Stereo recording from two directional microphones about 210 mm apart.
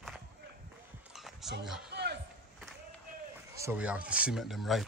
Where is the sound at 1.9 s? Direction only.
50° right (ahead or behind).